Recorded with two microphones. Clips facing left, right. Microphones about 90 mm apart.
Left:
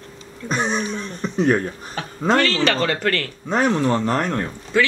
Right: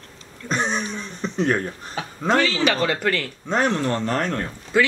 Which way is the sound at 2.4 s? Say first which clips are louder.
Even; 10° right (ahead or behind).